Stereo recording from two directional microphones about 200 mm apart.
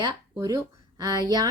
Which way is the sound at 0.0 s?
15° right (ahead or behind).